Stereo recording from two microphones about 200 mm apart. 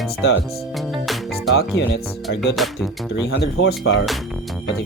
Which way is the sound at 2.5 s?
Centre (ahead or behind).